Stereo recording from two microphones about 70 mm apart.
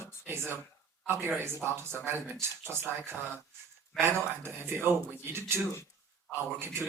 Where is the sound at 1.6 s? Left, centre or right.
Right.